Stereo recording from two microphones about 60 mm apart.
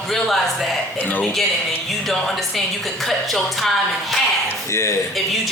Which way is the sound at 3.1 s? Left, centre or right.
Centre.